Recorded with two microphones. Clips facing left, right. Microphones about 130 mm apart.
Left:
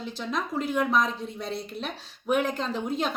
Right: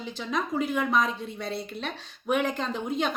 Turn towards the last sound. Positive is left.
turn(degrees=0)  # may be behind; listen again after turning